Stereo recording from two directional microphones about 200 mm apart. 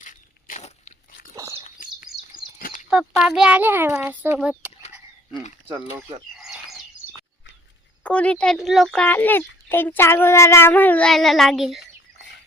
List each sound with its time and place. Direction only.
0.0 s a sound: 40° left (ahead or behind)
1.6 s bird: 40° left (ahead or behind)
2.6 s a sound: 45° left (ahead or behind)
2.9 s a child's voice: centre (ahead or behind)
6.3 s bird: centre (ahead or behind)
8.0 s speech: 5° left (ahead or behind)